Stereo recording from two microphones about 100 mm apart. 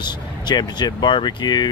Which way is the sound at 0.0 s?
45° left (ahead or behind).